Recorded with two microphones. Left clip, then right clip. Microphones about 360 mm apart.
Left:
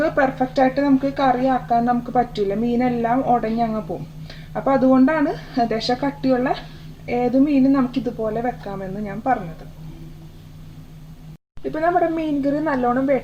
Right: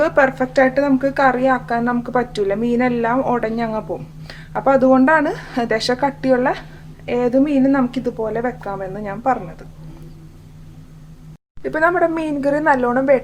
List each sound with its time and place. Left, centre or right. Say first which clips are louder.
0.0 s speech: right 4 dB; right
11.7 s speech: right 3 dB; right